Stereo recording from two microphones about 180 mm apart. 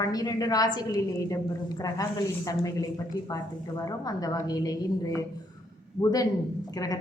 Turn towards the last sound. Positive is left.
turn(degrees=20)  # may be behind; listen again after turning